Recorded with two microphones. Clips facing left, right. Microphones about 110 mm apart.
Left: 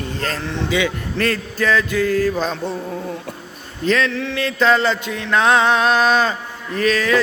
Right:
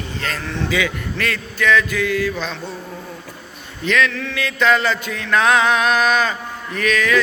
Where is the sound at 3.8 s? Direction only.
30° left (ahead or behind).